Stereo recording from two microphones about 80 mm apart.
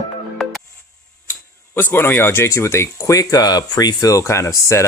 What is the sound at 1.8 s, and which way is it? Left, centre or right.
Speech, left.